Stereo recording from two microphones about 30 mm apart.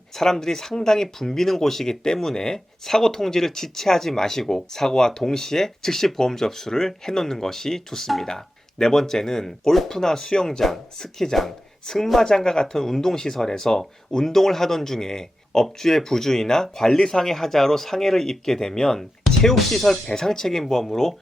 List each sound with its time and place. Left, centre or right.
0.1 s speech: centre